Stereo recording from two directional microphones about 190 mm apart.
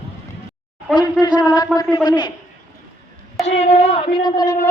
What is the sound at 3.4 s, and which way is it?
Speech, 35° left (ahead or behind).